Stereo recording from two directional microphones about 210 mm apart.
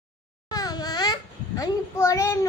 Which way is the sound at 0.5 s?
20° left (ahead or behind).